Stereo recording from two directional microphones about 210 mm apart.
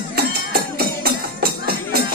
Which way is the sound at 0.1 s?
45° right (ahead or behind).